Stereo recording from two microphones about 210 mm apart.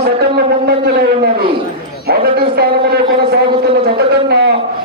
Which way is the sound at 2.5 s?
50° right (ahead or behind).